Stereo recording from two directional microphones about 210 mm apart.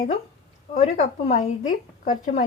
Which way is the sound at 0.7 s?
35° left (ahead or behind).